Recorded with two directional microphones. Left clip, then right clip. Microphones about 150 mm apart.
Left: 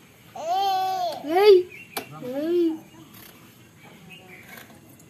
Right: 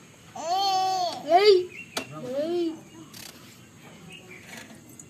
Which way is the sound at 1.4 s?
50° left (ahead or behind).